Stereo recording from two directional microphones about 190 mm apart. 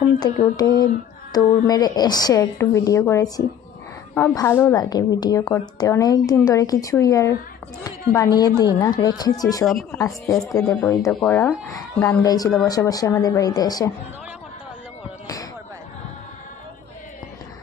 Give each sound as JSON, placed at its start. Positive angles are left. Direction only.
{"t": 0.2, "sound": "a woman's voice", "side_deg": 20}